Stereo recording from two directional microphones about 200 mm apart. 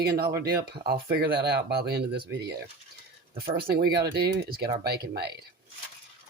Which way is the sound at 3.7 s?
50° right (ahead or behind).